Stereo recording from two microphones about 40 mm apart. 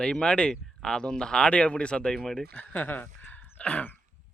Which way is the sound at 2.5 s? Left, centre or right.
Left.